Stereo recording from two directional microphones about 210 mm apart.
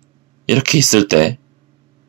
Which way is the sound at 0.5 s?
25° right (ahead or behind).